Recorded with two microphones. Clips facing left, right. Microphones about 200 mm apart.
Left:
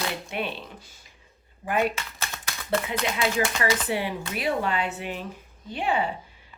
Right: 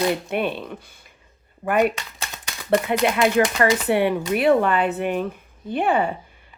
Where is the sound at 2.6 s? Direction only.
55° right (ahead or behind).